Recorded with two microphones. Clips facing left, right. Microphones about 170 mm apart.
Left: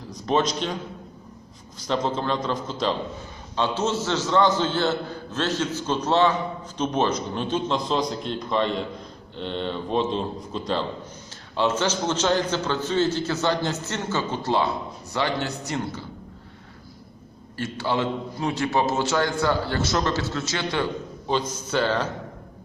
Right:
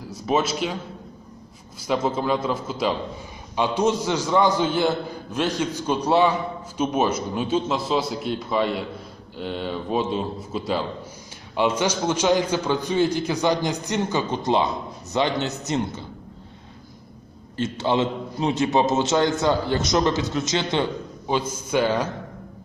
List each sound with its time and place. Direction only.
0.1 s a man's voice: 5° right (ahead or behind)
1.8 s a man's voice: 10° right (ahead or behind)
17.6 s a man's voice: 20° right (ahead or behind)